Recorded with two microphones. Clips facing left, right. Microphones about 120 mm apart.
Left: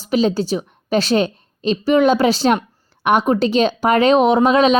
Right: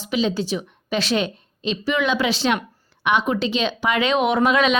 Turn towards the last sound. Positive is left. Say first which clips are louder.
# left 5 dB
turn(degrees=35)  # may be behind; listen again after turning